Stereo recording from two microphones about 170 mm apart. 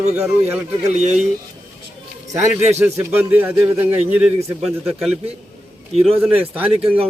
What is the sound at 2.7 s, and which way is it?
A man's voice, 15° right (ahead or behind).